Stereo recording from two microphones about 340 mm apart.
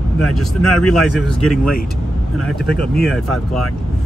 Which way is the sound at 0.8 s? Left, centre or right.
Centre.